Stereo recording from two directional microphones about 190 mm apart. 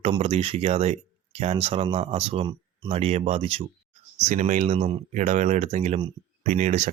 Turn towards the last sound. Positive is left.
turn(degrees=-40)  # may be behind; listen again after turning